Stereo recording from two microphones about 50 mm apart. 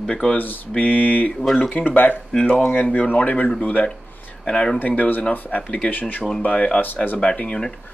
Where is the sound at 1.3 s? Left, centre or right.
Centre.